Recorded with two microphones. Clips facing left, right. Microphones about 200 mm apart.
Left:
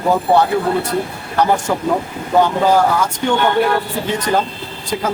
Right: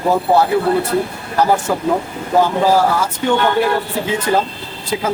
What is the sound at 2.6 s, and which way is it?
Speech, 5° right (ahead or behind).